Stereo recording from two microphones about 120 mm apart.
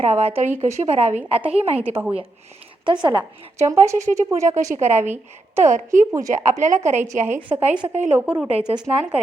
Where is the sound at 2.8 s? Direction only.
40° right (ahead or behind).